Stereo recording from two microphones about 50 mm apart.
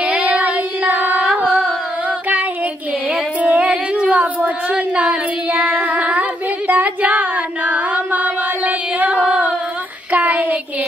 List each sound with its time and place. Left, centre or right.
0.0 s carnatic music: right
3.3 s a sound: right
6.7 s female singing: right
10.1 s child singing: right